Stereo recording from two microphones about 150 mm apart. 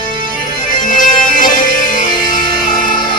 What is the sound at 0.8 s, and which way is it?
Music, 60° left (ahead or behind).